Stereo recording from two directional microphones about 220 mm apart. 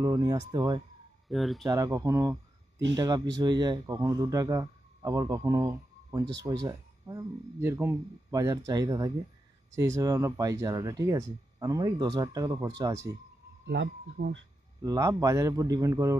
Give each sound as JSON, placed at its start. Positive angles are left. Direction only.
{"t": 0.0, "sound": "speech", "side_deg": -15}
{"t": 1.3, "sound": "speech", "side_deg": 0}
{"t": 1.7, "sound": "speech", "side_deg": -15}
{"t": 13.7, "sound": "speech", "side_deg": -50}
{"t": 14.8, "sound": "speech", "side_deg": -15}